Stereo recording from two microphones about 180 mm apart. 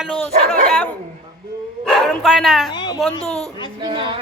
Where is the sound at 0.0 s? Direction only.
5° left (ahead or behind).